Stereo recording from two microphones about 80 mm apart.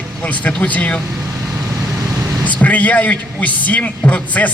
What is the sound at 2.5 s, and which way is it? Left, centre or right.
A man's voice, centre.